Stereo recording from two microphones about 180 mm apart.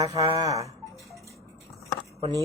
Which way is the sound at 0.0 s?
20° right (ahead or behind).